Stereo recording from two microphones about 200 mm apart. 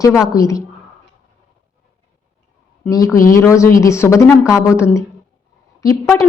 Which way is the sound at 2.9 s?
15° left (ahead or behind).